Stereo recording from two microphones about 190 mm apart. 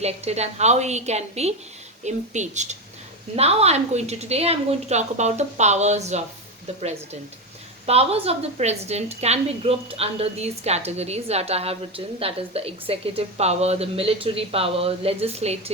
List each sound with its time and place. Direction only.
0.0 s a woman's voice: 35° right (ahead or behind)
7.9 s a woman's voice: 30° right (ahead or behind)